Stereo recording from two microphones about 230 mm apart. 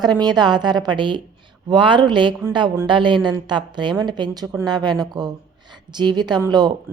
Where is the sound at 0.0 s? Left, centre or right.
Centre.